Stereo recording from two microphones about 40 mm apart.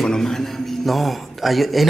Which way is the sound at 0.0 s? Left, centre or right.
Centre.